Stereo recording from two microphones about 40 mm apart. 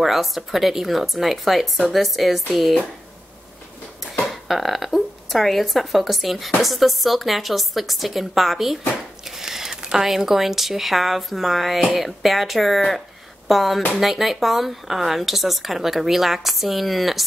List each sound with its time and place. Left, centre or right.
0.0 s speech: centre
4.3 s a woman's voice: centre